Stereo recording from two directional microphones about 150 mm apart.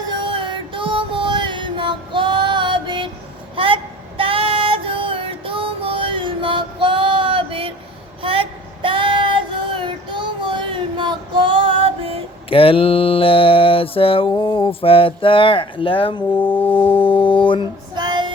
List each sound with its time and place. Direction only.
0.3 s music: 35° right (ahead or behind)
3.5 s a sound: 35° right (ahead or behind)
4.2 s music: 40° right (ahead or behind)
8.2 s child singing: 35° right (ahead or behind)
12.5 s mantra: 40° left (ahead or behind)
16.3 s music: 10° left (ahead or behind)
17.1 s music: 35° left (ahead or behind)
17.9 s music: 30° right (ahead or behind)